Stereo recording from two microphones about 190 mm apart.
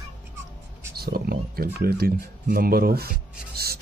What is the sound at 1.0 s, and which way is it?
Speech, 55° right (ahead or behind).